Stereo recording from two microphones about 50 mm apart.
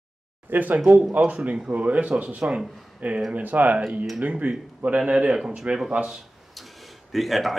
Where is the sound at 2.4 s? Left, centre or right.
Centre.